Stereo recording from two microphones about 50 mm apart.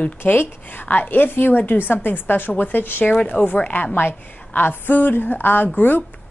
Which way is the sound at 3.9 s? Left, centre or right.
Left.